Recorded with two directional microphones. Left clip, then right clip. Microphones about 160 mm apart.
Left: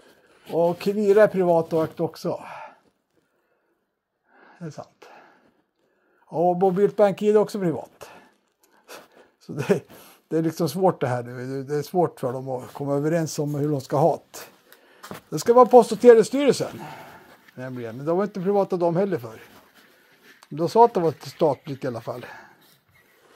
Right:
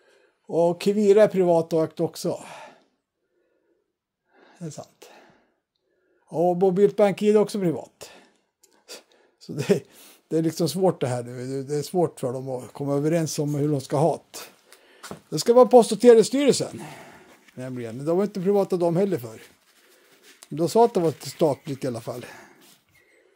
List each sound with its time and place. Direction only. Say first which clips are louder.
0.5 s speech: right 1 dB; 25° right (ahead or behind)
4.4 s a sound: left 1 dB; 30° right (ahead or behind)
6.2 s speech: left 1 dB; 30° right (ahead or behind)